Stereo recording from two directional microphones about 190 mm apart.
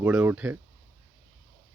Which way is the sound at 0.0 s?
10° right (ahead or behind).